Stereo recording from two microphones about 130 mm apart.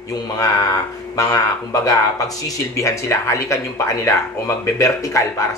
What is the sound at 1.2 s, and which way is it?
Speech, 30° left (ahead or behind).